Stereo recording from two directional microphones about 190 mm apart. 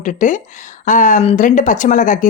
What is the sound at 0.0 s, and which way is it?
Speech, 40° left (ahead or behind).